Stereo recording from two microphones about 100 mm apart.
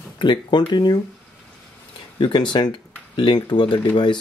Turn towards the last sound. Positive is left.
turn(degrees=50)  # may be behind; listen again after turning